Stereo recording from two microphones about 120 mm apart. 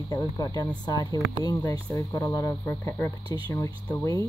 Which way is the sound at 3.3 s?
30° left (ahead or behind).